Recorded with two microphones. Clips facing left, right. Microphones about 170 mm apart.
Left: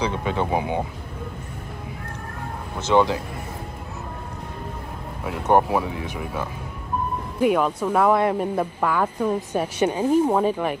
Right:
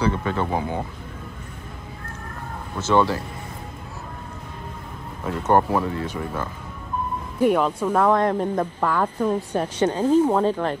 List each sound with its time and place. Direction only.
0.0 s speech: 15° left (ahead or behind)
2.8 s speech: 15° left (ahead or behind)
5.2 s speech: 10° left (ahead or behind)
7.4 s speech: 10° left (ahead or behind)